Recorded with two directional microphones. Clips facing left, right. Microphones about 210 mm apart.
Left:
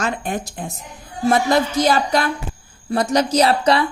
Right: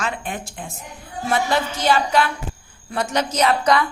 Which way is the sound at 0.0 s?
40° left (ahead or behind).